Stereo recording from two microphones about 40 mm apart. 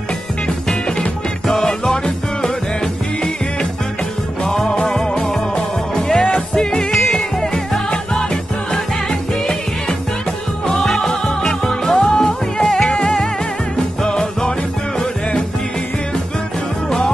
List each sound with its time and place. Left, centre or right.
0.7 s music: centre
4.5 s music: centre
4.7 s music: centre
10.8 s music: centre
12.6 s music: centre